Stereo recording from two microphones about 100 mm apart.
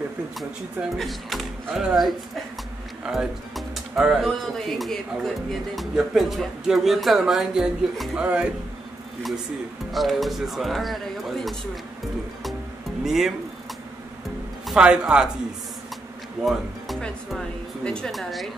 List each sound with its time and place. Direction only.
0.9 s speech: centre (ahead or behind)
9.9 s speech: centre (ahead or behind)
13.0 s speech: 5° right (ahead or behind)
14.7 s speech: 10° right (ahead or behind)
16.4 s music: centre (ahead or behind)
17.8 s a woman's voice: 10° left (ahead or behind)